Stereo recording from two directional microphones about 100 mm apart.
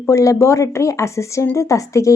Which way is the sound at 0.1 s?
30° left (ahead or behind).